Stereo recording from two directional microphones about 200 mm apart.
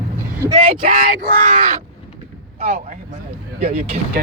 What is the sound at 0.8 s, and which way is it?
Speech, 45° right (ahead or behind).